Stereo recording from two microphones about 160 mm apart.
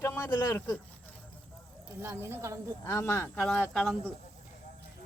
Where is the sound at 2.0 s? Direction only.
15° right (ahead or behind).